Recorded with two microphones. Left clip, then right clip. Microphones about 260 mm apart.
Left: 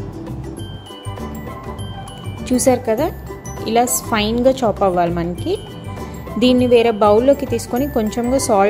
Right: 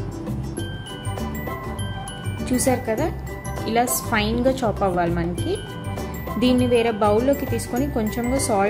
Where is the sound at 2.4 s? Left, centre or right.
Left.